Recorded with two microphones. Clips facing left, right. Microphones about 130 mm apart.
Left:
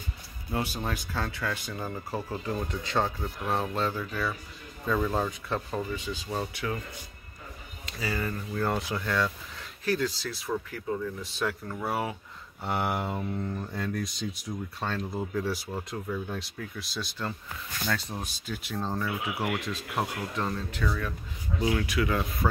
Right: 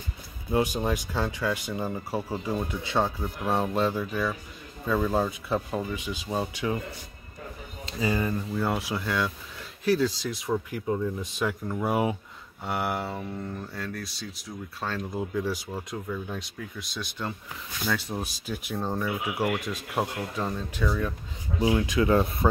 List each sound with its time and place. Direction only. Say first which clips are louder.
0.5 s speech: right 6 dB; 15° right (ahead or behind)
7.8 s speech: right 5 dB; 20° right (ahead or behind)
12.6 s speech: even; 5° right (ahead or behind)
14.8 s speech: right 2 dB; 5° right (ahead or behind)
21.5 s speech: right 4 dB; 20° right (ahead or behind)